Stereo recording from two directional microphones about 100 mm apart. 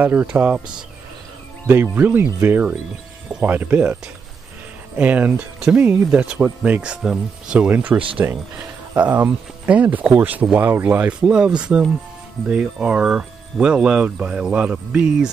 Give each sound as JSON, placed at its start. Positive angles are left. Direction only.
{"t": 0.0, "sound": "speech", "side_deg": -15}
{"t": 1.7, "sound": "speech", "side_deg": -20}